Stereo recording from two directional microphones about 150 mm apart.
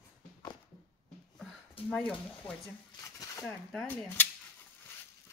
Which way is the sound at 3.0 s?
20° left (ahead or behind).